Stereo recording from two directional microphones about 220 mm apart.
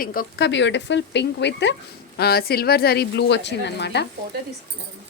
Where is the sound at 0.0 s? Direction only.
40° left (ahead or behind).